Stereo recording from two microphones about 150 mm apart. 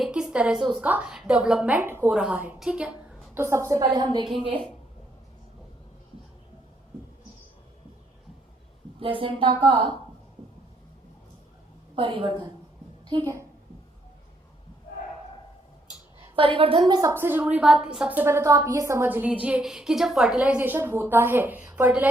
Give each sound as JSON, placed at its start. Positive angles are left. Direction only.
{"t": 0.0, "sound": "a woman's voice", "side_deg": -5}
{"t": 3.4, "sound": "a woman's voice", "side_deg": -20}
{"t": 9.0, "sound": "a woman's voice", "side_deg": -35}
{"t": 11.9, "sound": "a woman's voice", "side_deg": -35}
{"t": 16.3, "sound": "a woman's voice", "side_deg": -35}
{"t": 16.9, "sound": "a woman's voice", "side_deg": -25}